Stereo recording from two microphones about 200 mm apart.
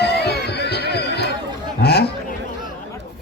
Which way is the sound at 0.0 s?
55° left (ahead or behind).